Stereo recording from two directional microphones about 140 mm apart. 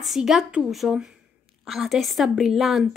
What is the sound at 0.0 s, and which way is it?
A woman's voice, centre (ahead or behind).